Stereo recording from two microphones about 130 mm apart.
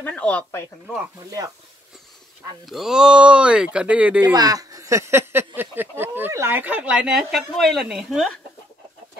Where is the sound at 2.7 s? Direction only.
5° right (ahead or behind).